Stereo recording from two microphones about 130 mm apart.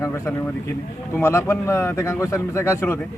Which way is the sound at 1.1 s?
20° left (ahead or behind).